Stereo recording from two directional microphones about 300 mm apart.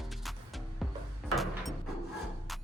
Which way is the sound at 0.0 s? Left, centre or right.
Centre.